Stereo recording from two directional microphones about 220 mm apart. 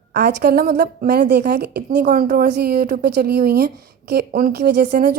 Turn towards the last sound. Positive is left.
turn(degrees=-50)  # may be behind; listen again after turning